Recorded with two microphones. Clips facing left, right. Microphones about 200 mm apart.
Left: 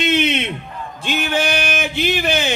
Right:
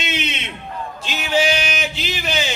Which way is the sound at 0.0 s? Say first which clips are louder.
Left 9 dB; 55° left (ahead or behind).